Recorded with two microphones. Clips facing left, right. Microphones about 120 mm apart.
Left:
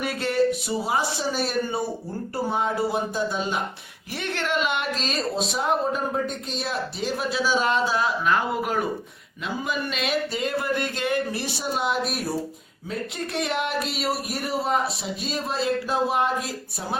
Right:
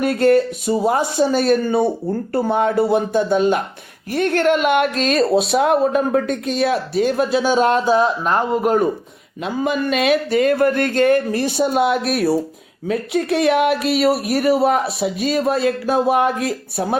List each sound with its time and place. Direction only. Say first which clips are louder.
0.0 s speech: right 8 dB; 50° right (ahead or behind)
9.4 s speech: right 8 dB; 55° right (ahead or behind)